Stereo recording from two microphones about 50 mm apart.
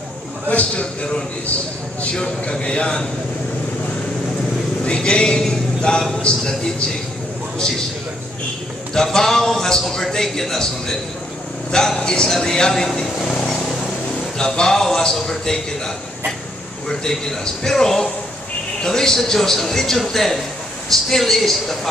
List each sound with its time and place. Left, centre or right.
0.5 s speech: left
4.8 s speech: left
8.9 s a man's voice: centre
14.4 s speech: centre
16.9 s a man's voice: centre